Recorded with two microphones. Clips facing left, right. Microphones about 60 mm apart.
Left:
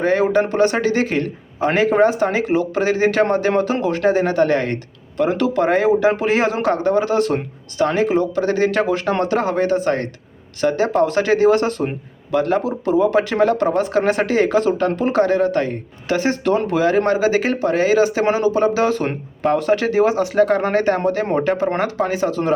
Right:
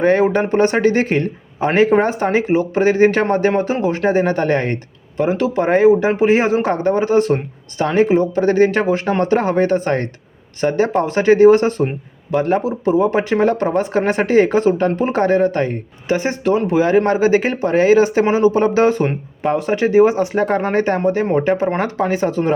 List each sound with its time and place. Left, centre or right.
0.0 s speech: right
3.8 s speech: right
5.1 s speech: centre
16.0 s speech: right
17.1 s speech: right
19.0 s speech: centre; by 22.5 s right